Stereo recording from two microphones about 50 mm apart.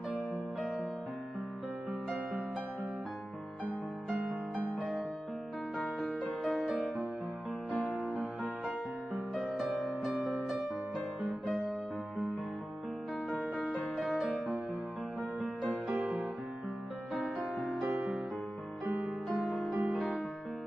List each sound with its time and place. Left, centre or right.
6.4 s music: centre
9.6 s music: centre
15.4 s music: left
17.7 s music: centre
19.7 s music: right
20.0 s music: centre